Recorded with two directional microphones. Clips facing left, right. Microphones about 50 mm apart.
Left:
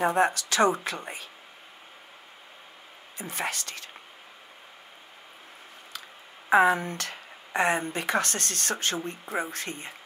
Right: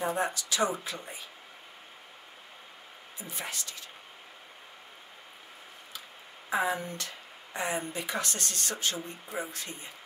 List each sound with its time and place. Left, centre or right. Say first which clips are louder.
0.0 s speech: left 7 dB; left
3.2 s speech: left 7 dB; left
6.5 s speech: left 9 dB; left